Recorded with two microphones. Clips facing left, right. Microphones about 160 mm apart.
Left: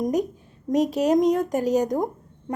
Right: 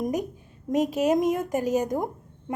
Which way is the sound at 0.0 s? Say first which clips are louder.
Left 4 dB; centre (ahead or behind).